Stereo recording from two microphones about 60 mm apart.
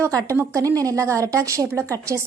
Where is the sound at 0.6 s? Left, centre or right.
Right.